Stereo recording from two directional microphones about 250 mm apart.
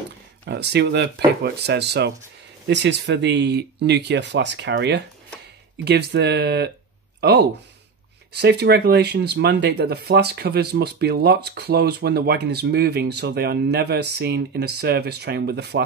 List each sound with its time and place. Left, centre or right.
0.5 s speech: right